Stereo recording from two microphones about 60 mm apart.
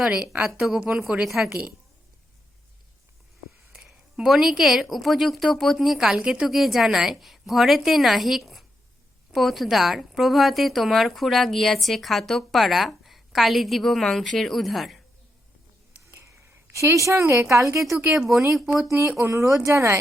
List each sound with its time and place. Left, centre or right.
0.4 s speech: centre
3.7 s speech: centre
6.5 s speech: centre
16.7 s a woman's voice: right
18.1 s speech: centre
19.2 s a woman's voice: right